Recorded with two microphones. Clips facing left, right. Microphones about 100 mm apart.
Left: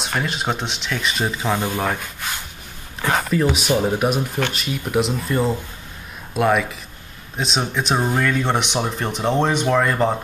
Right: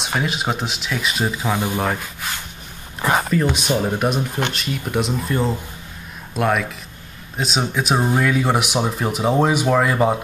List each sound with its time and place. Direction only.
0.0 s speech: 5° right (ahead or behind)
1.6 s speech: 15° right (ahead or behind)
1.9 s speech: centre (ahead or behind)